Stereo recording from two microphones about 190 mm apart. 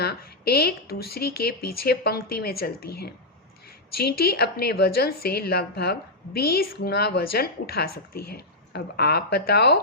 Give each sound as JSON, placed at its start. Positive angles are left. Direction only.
{"t": 0.0, "sound": "a woman's voice", "side_deg": 55}